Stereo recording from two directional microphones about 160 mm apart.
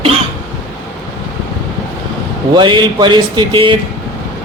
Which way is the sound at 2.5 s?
30° right (ahead or behind).